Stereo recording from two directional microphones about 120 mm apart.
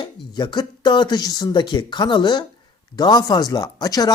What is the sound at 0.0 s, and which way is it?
A woman's voice, 40° left (ahead or behind).